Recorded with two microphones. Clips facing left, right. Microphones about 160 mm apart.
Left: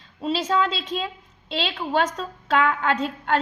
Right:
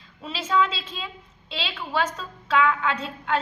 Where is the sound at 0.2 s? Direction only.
35° left (ahead or behind).